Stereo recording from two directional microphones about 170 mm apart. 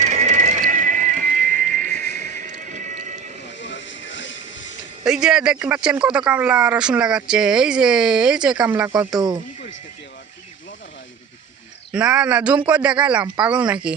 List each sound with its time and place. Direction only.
0.0 s music: 40° right (ahead or behind)
3.6 s music: 90° left
5.0 s speech: 5° right (ahead or behind)
9.1 s speech: 25° right (ahead or behind)
11.9 s speech: 5° right (ahead or behind)